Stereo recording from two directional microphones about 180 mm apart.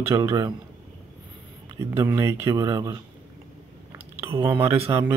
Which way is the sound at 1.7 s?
15° right (ahead or behind).